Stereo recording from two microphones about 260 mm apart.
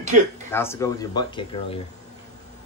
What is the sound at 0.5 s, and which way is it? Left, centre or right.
Speech, centre.